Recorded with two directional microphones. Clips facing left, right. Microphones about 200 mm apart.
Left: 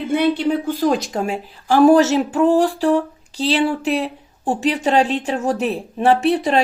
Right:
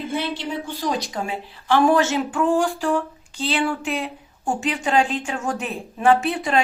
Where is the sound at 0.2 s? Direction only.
60° left (ahead or behind).